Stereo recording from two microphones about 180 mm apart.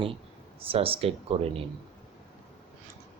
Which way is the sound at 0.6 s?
30° right (ahead or behind).